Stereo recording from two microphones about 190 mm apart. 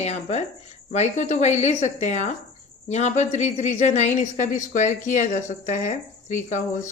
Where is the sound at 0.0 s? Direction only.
35° left (ahead or behind).